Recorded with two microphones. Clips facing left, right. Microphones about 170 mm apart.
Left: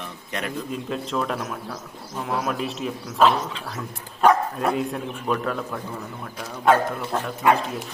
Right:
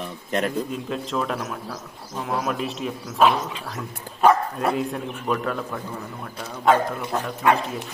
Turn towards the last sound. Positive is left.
turn(degrees=0)  # may be behind; listen again after turning